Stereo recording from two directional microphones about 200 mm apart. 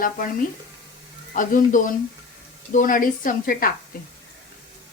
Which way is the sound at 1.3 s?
40° left (ahead or behind).